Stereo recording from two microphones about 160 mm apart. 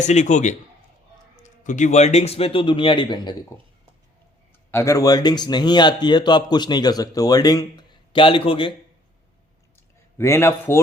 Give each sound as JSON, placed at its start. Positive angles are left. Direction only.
{"t": 0.0, "sound": "a man's voice", "side_deg": 45}
{"t": 4.7, "sound": "speech", "side_deg": 20}
{"t": 10.2, "sound": "a man's voice", "side_deg": 15}